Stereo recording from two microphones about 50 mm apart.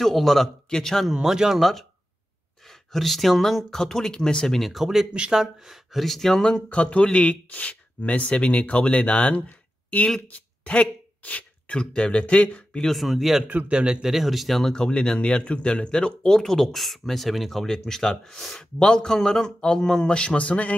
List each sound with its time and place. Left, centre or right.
0.0 s speech: centre
1.1 s speech: centre
1.6 s speech: centre
2.9 s speech: centre
5.1 s speech: centre
6.4 s speech: left
10.3 s a sound: left
11.8 s speech: left
12.9 s speech: centre
13.5 s a man's voice: right
14.0 s speech: centre
14.7 s speech: centre